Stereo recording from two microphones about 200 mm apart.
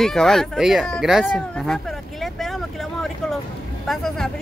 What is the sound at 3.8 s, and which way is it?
Speech, centre (ahead or behind).